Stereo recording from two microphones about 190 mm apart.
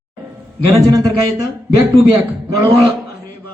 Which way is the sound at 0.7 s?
15° right (ahead or behind).